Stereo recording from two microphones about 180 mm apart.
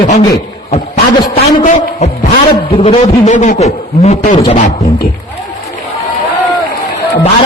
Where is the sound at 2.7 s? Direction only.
30° left (ahead or behind).